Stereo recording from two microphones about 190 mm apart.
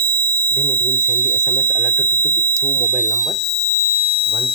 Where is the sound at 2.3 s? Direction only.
50° right (ahead or behind).